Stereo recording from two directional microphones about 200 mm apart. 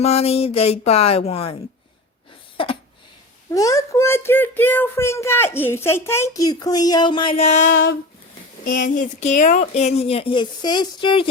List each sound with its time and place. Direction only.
0.0 s speech: 30° left (ahead or behind)
2.6 s a sound: 25° left (ahead or behind)
3.5 s speech: 15° left (ahead or behind)